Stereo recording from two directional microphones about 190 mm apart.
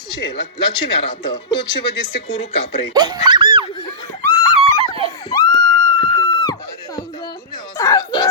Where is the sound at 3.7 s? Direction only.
20° left (ahead or behind).